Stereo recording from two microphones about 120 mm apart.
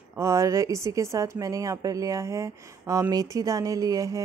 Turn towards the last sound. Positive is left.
turn(degrees=-30)  # may be behind; listen again after turning